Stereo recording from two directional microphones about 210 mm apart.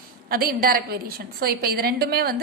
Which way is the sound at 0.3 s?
45° right (ahead or behind).